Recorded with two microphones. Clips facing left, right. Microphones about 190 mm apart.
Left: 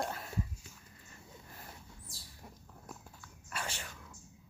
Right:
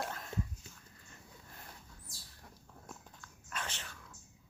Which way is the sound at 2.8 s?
10° left (ahead or behind).